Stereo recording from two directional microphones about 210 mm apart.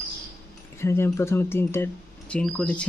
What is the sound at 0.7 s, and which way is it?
Speech, 10° left (ahead or behind).